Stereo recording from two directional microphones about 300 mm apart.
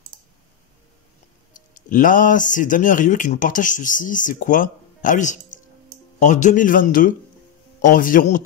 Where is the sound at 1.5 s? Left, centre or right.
Left.